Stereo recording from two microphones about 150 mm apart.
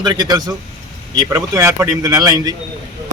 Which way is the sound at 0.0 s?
25° right (ahead or behind).